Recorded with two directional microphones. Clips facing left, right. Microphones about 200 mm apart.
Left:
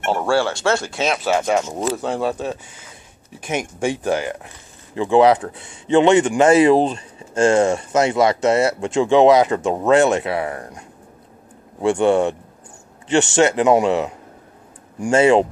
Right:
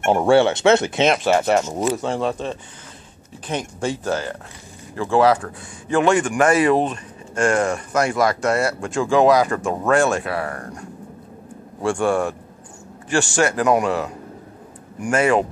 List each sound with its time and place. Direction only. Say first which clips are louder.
0.0 s speech: right 4 dB; 20° right (ahead or behind)
1.0 s speech: left 1 dB; centre (ahead or behind); by 15.4 s 25° left (ahead or behind)